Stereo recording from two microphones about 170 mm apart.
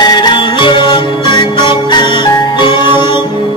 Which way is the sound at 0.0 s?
25° left (ahead or behind).